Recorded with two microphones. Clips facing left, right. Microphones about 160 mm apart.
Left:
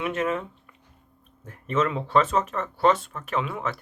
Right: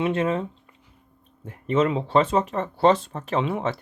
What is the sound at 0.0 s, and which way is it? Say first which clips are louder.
Speech: right 3 dB; 30° right (ahead or behind).